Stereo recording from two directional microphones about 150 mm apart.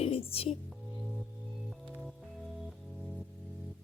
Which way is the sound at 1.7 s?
Centre (ahead or behind).